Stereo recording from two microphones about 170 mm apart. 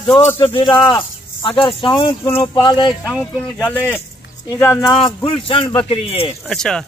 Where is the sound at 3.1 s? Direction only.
5° right (ahead or behind).